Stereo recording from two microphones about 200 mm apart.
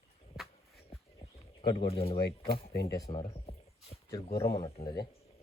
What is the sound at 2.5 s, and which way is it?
Speech, 50° left (ahead or behind).